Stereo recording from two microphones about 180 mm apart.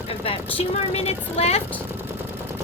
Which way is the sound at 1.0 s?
35° left (ahead or behind).